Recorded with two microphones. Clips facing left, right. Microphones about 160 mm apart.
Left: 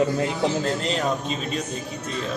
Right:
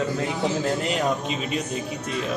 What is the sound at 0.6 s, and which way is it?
Speech, 10° right (ahead or behind).